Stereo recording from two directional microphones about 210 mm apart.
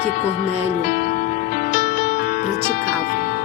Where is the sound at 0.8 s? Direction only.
40° left (ahead or behind).